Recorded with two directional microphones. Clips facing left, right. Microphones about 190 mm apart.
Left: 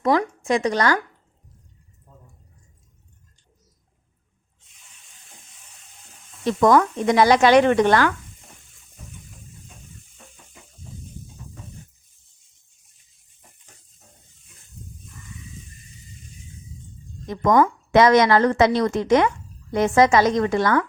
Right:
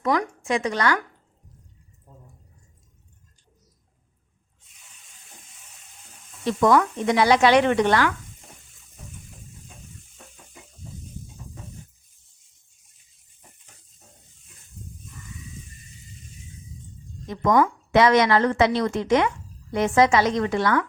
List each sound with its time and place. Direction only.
0.0 s speech: 35° left (ahead or behind)
6.6 s a woman's voice: 45° left (ahead or behind)
17.2 s a woman's voice: 45° left (ahead or behind)